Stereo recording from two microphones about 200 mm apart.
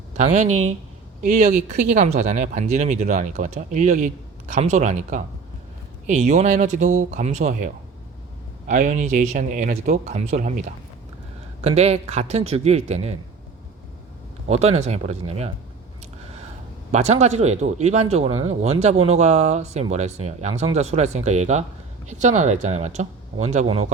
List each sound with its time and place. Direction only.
0.2 s speech: 35° right (ahead or behind)
14.4 s speech: 35° right (ahead or behind)
16.9 s speech: 35° right (ahead or behind)